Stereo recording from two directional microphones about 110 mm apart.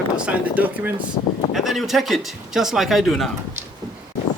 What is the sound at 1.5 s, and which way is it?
Speech, centre (ahead or behind).